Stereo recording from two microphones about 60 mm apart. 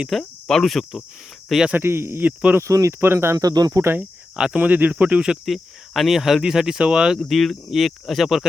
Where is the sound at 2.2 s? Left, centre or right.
Right.